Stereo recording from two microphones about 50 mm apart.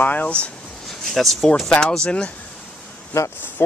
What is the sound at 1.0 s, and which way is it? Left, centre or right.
Speech, centre.